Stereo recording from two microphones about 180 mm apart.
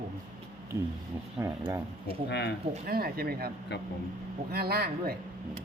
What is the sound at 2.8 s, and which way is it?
A woman's voice, 60° right (ahead or behind).